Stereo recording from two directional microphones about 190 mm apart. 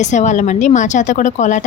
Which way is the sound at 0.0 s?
40° left (ahead or behind).